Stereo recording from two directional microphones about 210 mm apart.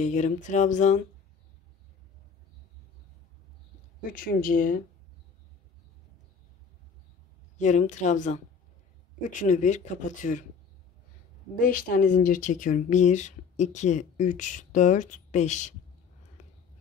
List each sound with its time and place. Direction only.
0.0 s speech: 35° left (ahead or behind)
4.1 s speech: 40° left (ahead or behind)
7.5 s speech: 35° left (ahead or behind)
11.6 s speech: 40° left (ahead or behind)